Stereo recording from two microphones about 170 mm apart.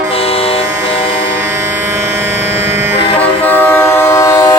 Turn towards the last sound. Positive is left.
turn(degrees=15)  # may be behind; listen again after turning